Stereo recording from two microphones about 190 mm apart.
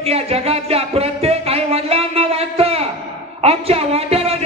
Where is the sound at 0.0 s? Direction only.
30° right (ahead or behind).